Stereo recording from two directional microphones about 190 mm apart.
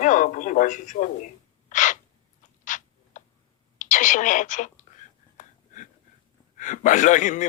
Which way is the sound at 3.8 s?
40° left (ahead or behind).